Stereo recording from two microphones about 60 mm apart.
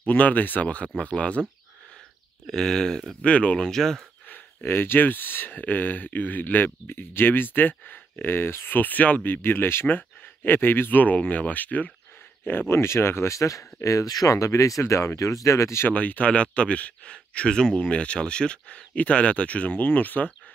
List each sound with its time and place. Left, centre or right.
0.0 s speech: left
2.4 s speech: centre
3.3 s speech: left
3.6 s speech: centre
4.3 s speech: left
12.4 s speech: left
15.9 s speech: left